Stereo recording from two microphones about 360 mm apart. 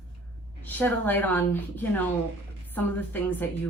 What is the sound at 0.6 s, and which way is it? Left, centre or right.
A woman's voice, centre.